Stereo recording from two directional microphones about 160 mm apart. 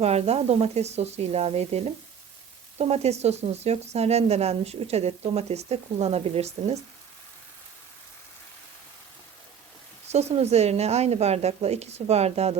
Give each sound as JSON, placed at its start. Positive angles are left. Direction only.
{"t": 0.0, "sound": "speech", "side_deg": -40}
{"t": 10.1, "sound": "speech", "side_deg": -40}